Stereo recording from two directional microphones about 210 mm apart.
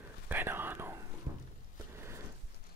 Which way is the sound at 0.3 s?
10° right (ahead or behind).